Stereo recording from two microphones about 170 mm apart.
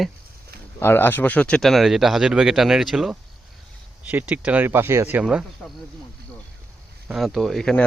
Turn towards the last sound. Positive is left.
turn(degrees=0)  # may be behind; listen again after turning